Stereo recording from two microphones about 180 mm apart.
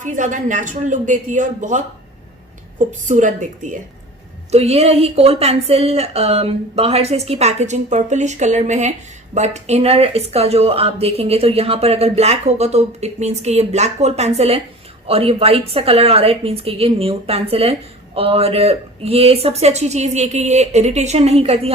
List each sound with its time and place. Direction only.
0.0 s speech: 45° right (ahead or behind)